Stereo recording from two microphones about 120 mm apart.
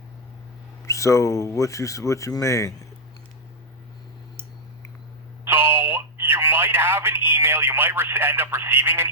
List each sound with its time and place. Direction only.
0.9 s speech: 25° left (ahead or behind)
5.5 s telephone: 20° right (ahead or behind)